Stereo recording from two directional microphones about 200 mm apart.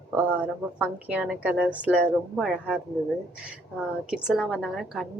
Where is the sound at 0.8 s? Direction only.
5° right (ahead or behind).